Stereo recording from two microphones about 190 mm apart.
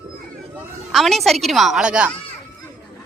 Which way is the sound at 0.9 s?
Centre (ahead or behind).